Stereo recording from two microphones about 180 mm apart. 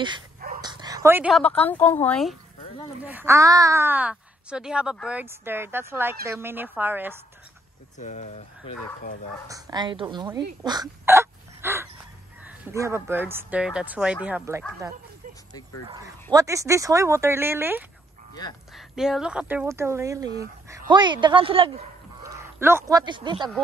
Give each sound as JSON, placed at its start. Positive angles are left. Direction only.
{"t": 0.6, "sound": "dog", "side_deg": -25}
{"t": 1.3, "sound": "a woman's voice", "side_deg": 5}
{"t": 3.0, "sound": "speech", "side_deg": -10}
{"t": 8.0, "sound": "speech", "side_deg": 40}
{"t": 9.5, "sound": "speech", "side_deg": -20}
{"t": 10.2, "sound": "hiccup", "side_deg": -20}
{"t": 12.4, "sound": "speech", "side_deg": -15}
{"t": 15.9, "sound": "speech", "side_deg": -20}
{"t": 22.2, "sound": "speech", "side_deg": -15}